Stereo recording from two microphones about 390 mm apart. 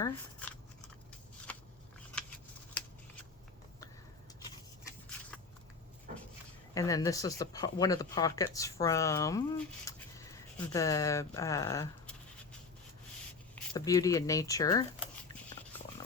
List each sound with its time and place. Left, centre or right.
0.0 s scissors: centre
1.5 s a sound: centre
2.2 s shuffling cards: centre
6.1 s a sound: centre
6.7 s speech: centre
13.6 s speech: centre